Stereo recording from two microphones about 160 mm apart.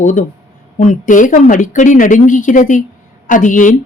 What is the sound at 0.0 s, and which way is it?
Speech, 50° left (ahead or behind).